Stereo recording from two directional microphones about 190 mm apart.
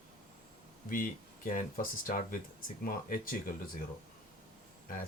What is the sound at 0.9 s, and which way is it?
Speech, 45° left (ahead or behind).